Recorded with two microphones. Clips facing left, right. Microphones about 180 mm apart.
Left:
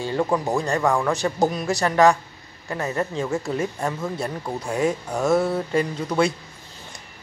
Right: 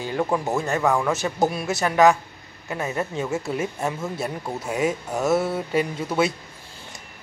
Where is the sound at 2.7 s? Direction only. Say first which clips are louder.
Left 1 dB; 10° right (ahead or behind).